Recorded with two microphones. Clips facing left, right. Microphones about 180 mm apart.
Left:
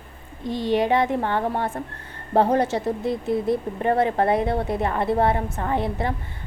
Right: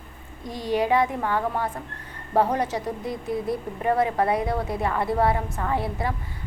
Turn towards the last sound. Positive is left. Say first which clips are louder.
# left 2 dB
turn(degrees=25)  # may be behind; listen again after turning